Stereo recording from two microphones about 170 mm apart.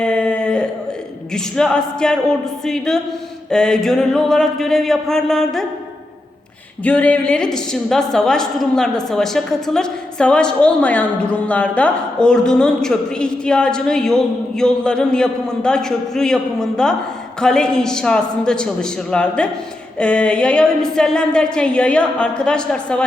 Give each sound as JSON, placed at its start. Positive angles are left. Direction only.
{"t": 0.0, "sound": "a sound", "side_deg": 5}
{"t": 1.3, "sound": "a woman's voice", "side_deg": 5}
{"t": 6.8, "sound": "a woman's voice", "side_deg": 10}